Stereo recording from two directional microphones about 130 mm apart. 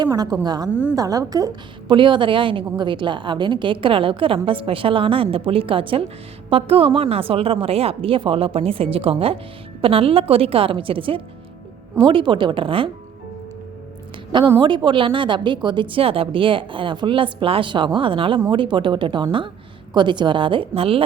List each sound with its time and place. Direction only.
0.0 s a woman's voice: 30° right (ahead or behind)
0.7 s a woman's voice: 10° right (ahead or behind)
0.9 s a woman's voice: 25° right (ahead or behind); by 12.9 s 40° right (ahead or behind)
14.6 s a woman's voice: 35° right (ahead or behind)